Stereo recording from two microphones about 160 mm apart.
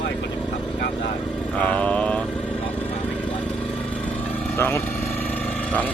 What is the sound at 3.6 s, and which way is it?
Vehicle, 10° left (ahead or behind).